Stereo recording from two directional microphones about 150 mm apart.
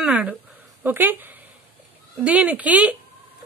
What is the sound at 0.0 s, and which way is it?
A woman's voice, 10° right (ahead or behind).